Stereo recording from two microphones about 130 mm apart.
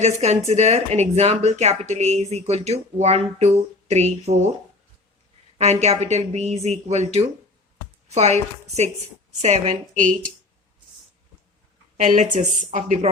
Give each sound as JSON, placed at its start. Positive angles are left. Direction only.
{"t": 0.0, "sound": "speech", "side_deg": -55}
{"t": 5.5, "sound": "speech", "side_deg": -55}
{"t": 12.0, "sound": "speech", "side_deg": -70}